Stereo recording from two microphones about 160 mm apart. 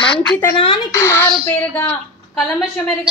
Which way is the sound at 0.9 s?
15° left (ahead or behind).